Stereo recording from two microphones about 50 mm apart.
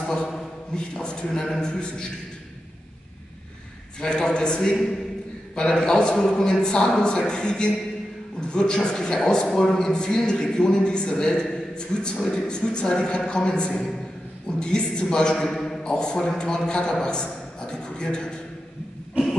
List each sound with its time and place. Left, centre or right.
0.0 s a sound: centre
0.7 s a man's voice: centre
4.0 s a man's voice: centre
15.8 s a man's voice: centre